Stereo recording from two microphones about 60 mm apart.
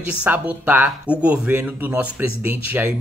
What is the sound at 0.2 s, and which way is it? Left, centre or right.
Speech, right.